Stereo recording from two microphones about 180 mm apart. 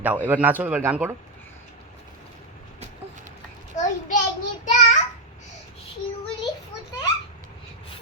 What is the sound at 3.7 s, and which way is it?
Child singing, 40° left (ahead or behind).